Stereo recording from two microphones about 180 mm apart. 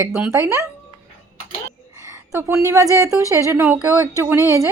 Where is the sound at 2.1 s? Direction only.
15° right (ahead or behind).